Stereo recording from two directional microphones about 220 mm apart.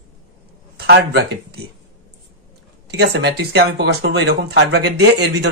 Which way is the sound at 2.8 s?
50° right (ahead or behind).